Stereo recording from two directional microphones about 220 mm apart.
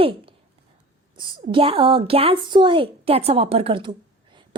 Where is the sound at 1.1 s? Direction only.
25° right (ahead or behind).